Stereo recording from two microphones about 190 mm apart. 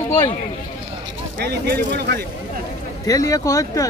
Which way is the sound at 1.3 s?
55° right (ahead or behind).